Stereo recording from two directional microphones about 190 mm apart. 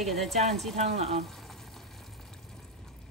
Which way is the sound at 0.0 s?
Centre (ahead or behind).